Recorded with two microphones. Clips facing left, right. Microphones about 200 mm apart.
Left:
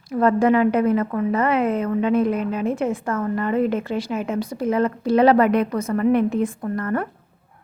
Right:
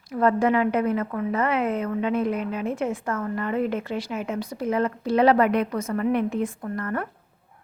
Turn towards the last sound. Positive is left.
turn(degrees=40)  # may be behind; listen again after turning